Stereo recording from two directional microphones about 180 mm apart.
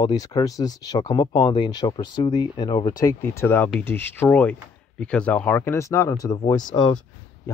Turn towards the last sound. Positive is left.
turn(degrees=25)  # may be behind; listen again after turning